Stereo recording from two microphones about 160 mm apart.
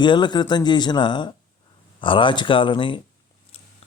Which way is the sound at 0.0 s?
30° left (ahead or behind).